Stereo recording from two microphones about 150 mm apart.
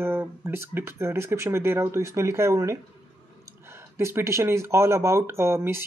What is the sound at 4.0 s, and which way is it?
Speech, 20° right (ahead or behind).